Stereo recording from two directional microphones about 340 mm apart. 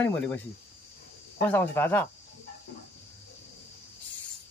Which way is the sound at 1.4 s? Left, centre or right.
Centre.